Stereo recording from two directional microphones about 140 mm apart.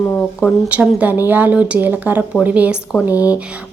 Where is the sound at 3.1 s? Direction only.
25° left (ahead or behind).